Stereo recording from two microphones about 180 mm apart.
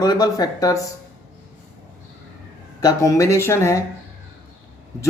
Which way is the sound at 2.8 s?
20° left (ahead or behind).